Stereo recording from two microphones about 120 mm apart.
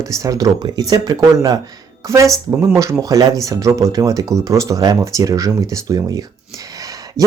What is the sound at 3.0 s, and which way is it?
Speech, 30° right (ahead or behind).